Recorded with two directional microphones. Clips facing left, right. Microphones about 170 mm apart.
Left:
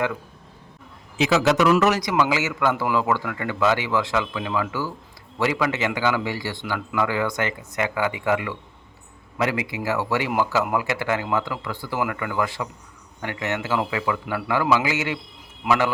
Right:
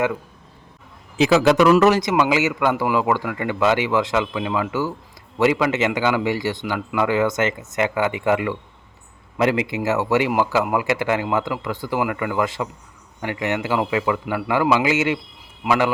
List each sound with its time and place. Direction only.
1.3 s a man's voice: 55° right (ahead or behind)
1.7 s a man's voice: 30° right (ahead or behind); by 15.9 s 10° right (ahead or behind)